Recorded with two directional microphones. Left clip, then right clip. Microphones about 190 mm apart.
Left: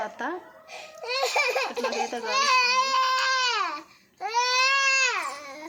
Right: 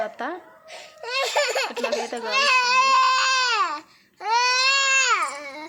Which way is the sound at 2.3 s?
65° right (ahead or behind).